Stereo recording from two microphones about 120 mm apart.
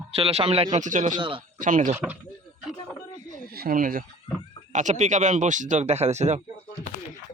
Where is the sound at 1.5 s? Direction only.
90° right.